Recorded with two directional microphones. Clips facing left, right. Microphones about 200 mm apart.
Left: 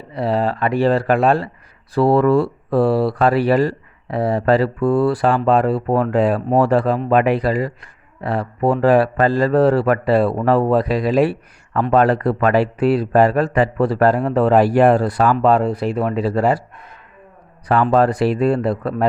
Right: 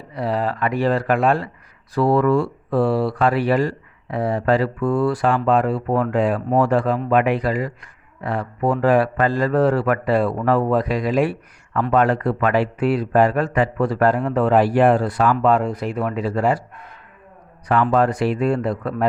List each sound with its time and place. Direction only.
0.1 s speech: 30° left (ahead or behind)
17.9 s speech: 35° left (ahead or behind)